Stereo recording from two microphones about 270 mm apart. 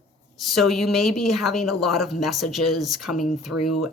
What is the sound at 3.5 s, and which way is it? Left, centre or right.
Speech, left.